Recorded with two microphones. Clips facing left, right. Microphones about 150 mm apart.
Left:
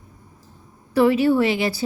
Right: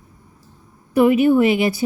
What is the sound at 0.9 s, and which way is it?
Speech, 20° right (ahead or behind).